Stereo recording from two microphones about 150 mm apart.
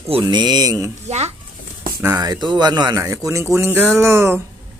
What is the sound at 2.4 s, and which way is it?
A man's voice, 30° right (ahead or behind).